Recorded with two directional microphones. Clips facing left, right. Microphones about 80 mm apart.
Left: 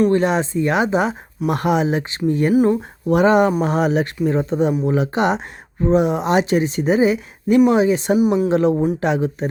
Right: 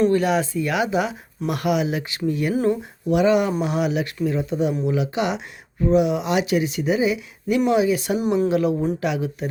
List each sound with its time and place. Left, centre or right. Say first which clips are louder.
0.1 s speech: left 2 dB; left
2.5 s speech: left 6 dB; centre
3.1 s speech: left 4 dB; left
8.2 s a woman's voice: left 3 dB; centre
8.4 s speech: left 4 dB; left